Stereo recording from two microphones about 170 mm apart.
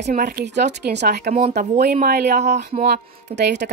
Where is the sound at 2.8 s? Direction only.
75° right (ahead or behind).